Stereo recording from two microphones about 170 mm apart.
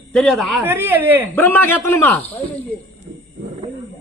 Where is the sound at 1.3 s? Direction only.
10° left (ahead or behind).